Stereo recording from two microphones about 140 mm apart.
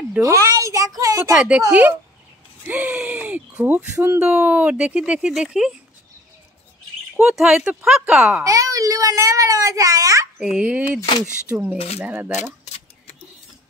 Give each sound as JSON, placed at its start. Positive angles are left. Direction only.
{"t": 0.2, "sound": "a sound", "side_deg": -25}
{"t": 1.7, "sound": "speech", "side_deg": -10}
{"t": 7.2, "sound": "speech", "side_deg": -5}
{"t": 8.5, "sound": "a child's voice", "side_deg": -25}
{"t": 10.4, "sound": "speech", "side_deg": -5}
{"t": 12.4, "sound": "keys jangling", "side_deg": 50}